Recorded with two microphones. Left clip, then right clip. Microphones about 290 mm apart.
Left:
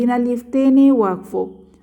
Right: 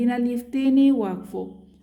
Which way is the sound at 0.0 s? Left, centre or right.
Centre.